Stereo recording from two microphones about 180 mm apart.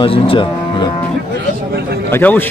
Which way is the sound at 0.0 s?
30° left (ahead or behind).